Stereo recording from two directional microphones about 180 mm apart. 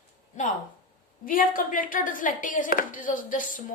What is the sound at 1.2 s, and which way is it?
A woman's voice, 50° left (ahead or behind).